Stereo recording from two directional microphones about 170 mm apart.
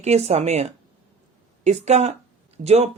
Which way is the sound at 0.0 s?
40° right (ahead or behind).